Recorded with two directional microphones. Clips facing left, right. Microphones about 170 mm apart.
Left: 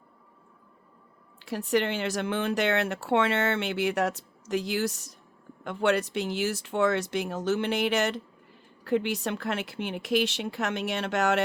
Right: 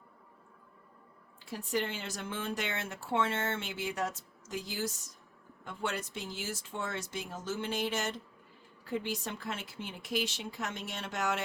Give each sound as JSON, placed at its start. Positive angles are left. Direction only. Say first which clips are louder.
{"t": 1.4, "sound": "speech", "louder": "left 8 dB", "side_deg": 75}